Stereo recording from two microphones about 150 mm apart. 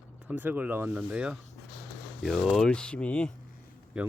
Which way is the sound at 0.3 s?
10° right (ahead or behind).